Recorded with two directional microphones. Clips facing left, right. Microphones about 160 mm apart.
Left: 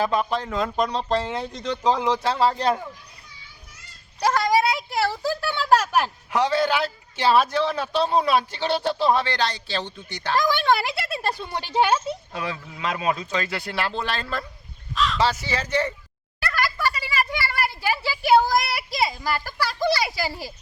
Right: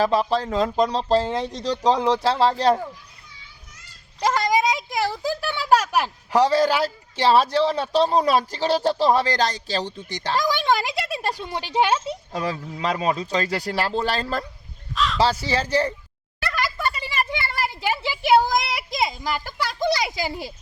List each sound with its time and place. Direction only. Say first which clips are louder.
0.0 s a man's voice: right 3 dB; 30° right (ahead or behind)
4.5 s a woman's voice: even; 15° right (ahead or behind)
6.3 s a man's voice: right 3 dB; 35° right (ahead or behind)
10.3 s a woman's voice: left 1 dB; 10° right (ahead or behind)
12.3 s a man's voice: right 4 dB; 40° right (ahead or behind)
14.9 s crow: even; centre (ahead or behind)
15.2 s a man's voice: right 5 dB; 35° right (ahead or behind)
16.6 s a sound: left 1 dB; 20° right (ahead or behind)
17.3 s speech: even; 20° right (ahead or behind)